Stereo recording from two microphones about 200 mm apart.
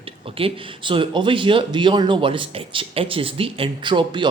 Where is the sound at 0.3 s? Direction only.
25° right (ahead or behind).